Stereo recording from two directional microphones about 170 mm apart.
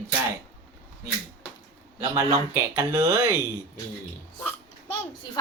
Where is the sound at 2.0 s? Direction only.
15° right (ahead or behind).